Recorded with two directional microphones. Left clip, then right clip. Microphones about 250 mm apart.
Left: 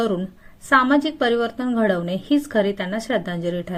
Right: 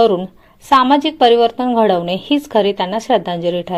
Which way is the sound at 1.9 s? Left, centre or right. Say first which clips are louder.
Right 8 dB; centre.